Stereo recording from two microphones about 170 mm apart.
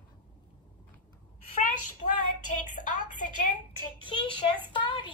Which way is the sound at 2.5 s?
50° left (ahead or behind).